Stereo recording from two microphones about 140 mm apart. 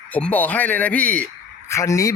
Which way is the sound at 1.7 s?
25° left (ahead or behind).